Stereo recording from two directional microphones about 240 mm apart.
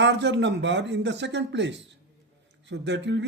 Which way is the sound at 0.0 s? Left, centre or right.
Right.